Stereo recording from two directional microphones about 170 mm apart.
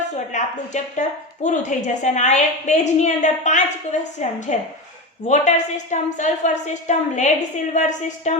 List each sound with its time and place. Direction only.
0.3 s a woman's voice: 45° left (ahead or behind)